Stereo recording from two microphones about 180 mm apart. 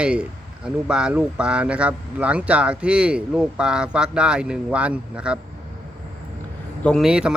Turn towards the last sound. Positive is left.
turn(degrees=-5)  # may be behind; listen again after turning